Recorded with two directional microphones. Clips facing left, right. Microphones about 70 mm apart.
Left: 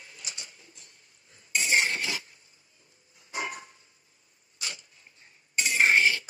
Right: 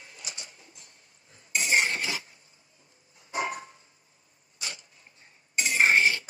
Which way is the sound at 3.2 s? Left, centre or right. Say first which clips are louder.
Right 4 dB; right.